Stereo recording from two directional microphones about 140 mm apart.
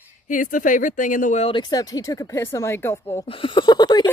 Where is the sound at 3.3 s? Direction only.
40° left (ahead or behind).